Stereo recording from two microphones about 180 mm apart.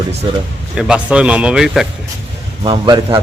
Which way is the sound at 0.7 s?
5° right (ahead or behind).